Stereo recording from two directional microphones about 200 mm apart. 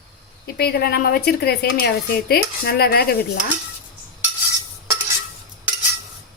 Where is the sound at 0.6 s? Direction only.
50° left (ahead or behind).